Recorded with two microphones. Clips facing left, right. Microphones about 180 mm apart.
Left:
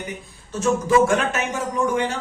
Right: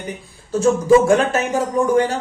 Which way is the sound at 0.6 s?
30° right (ahead or behind).